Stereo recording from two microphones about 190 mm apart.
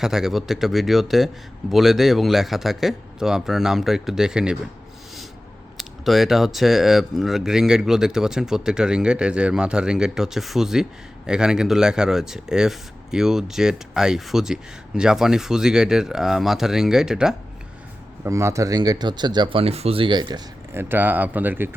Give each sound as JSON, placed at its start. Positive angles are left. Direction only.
{"t": 0.0, "sound": "speech", "side_deg": 0}
{"t": 5.7, "sound": "speech", "side_deg": 0}
{"t": 18.2, "sound": "speech", "side_deg": -15}
{"t": 20.7, "sound": "speech", "side_deg": -10}